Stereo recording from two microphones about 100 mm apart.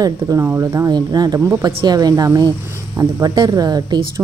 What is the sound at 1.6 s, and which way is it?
Speech, 40° right (ahead or behind).